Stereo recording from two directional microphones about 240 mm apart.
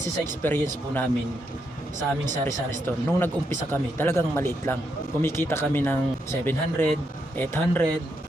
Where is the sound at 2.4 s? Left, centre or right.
Centre.